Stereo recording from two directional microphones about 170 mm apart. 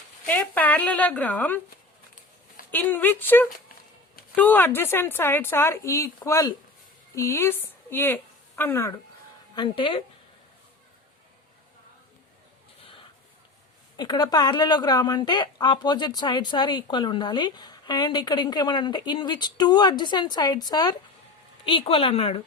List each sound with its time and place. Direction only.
0.3 s speech: 10° left (ahead or behind)
2.7 s a woman's voice: 10° left (ahead or behind)
9.6 s speech: 30° left (ahead or behind)
13.9 s a woman's voice: 25° left (ahead or behind)